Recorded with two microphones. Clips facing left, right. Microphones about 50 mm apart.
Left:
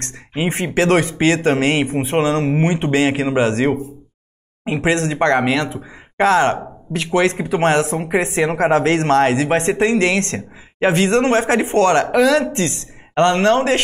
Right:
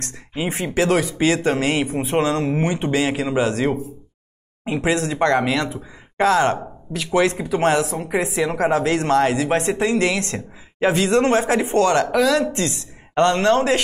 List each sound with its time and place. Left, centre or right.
0.3 s speech: left
2.0 s speech: left
4.8 s speech: left
12.1 s speech: centre
12.4 s speech: left